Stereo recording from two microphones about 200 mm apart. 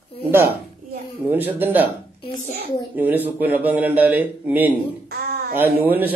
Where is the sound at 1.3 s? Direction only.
10° right (ahead or behind).